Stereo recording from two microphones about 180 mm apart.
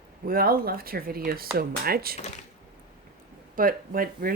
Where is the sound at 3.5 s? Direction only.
50° right (ahead or behind).